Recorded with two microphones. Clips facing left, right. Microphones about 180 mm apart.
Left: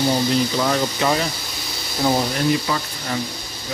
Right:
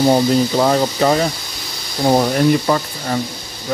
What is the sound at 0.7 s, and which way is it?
Speech, 40° right (ahead or behind).